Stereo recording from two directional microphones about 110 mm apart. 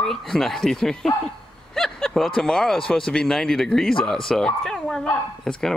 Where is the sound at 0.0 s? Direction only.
Centre (ahead or behind).